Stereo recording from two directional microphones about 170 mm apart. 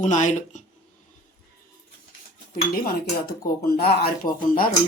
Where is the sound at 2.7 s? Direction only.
60° left (ahead or behind).